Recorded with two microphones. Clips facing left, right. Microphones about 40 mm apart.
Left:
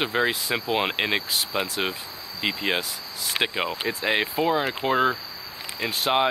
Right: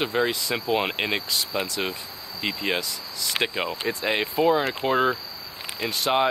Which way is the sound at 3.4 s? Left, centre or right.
Centre.